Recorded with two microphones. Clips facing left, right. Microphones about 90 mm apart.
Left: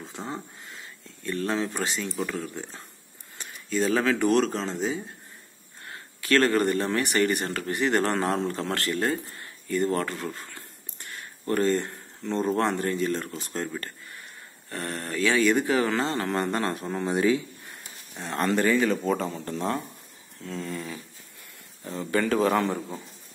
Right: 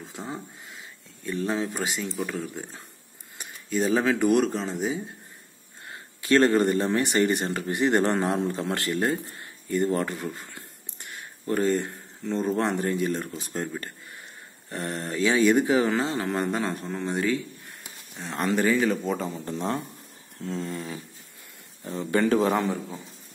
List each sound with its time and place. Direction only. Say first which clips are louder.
0.2 s speech: even; 5° right (ahead or behind)
4.5 s speech: right 1 dB; 5° right (ahead or behind)
5.9 s speech: right 2 dB; 20° right (ahead or behind); by 12.6 s centre (ahead or behind)
12.6 s speech: even; 15° right (ahead or behind)
16.0 s speech: even; 5° right (ahead or behind)
19.5 s speech: even; 20° right (ahead or behind)
20.3 s a sound: right 2 dB; 35° right (ahead or behind)
21.9 s speech: right 2 dB; 25° right (ahead or behind)